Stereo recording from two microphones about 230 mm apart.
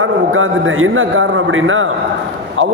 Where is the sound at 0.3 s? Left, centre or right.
Right.